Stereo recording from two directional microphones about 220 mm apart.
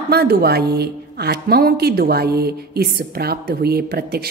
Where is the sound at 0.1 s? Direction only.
45° right (ahead or behind).